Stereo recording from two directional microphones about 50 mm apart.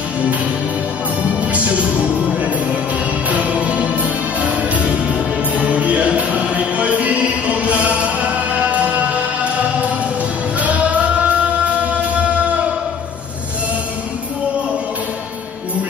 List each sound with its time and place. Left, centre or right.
3.3 s music: right
10.6 s music: right